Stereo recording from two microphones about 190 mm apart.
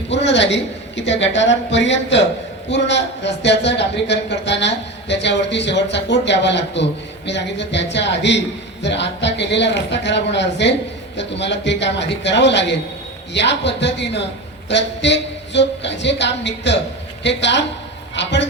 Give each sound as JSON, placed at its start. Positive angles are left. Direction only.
{"t": 0.1, "sound": "a man's voice", "side_deg": 70}